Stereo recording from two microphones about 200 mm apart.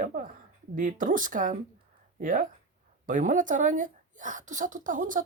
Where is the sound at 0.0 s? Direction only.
45° right (ahead or behind).